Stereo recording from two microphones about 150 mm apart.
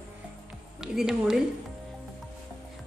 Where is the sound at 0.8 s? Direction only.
5° right (ahead or behind).